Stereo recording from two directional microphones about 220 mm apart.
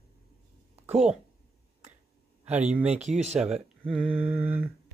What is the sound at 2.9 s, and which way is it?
Speech, 30° right (ahead or behind).